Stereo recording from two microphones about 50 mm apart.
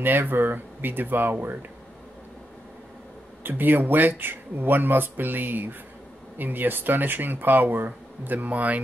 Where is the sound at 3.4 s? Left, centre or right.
Right.